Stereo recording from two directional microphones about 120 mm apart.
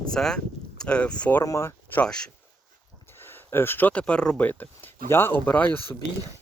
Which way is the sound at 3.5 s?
20° left (ahead or behind).